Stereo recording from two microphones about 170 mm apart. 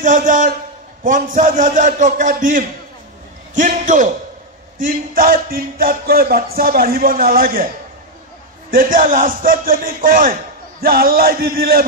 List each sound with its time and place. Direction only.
0.0 s a man's voice: 50° right (ahead or behind)
4.7 s music: 55° right (ahead or behind)
8.6 s music: 55° right (ahead or behind)